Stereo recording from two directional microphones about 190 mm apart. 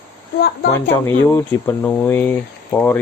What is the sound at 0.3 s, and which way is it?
Speech, 55° left (ahead or behind).